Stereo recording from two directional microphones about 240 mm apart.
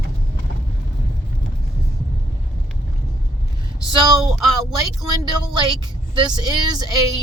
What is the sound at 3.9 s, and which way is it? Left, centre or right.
Speech, centre.